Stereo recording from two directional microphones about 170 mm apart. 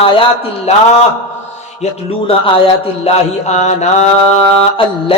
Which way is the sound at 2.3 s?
30° left (ahead or behind).